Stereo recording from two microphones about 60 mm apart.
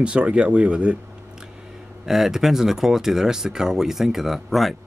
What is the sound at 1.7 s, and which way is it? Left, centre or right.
Speech, centre.